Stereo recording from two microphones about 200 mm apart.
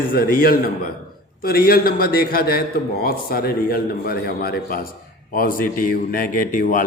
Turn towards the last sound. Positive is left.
turn(degrees=45)  # may be behind; listen again after turning